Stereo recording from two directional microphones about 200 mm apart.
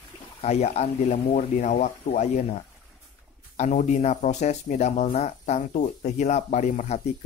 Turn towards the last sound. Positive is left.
turn(degrees=35)  # may be behind; listen again after turning